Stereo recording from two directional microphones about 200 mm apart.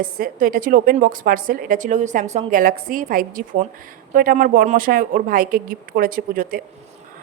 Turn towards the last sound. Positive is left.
turn(degrees=-45)  # may be behind; listen again after turning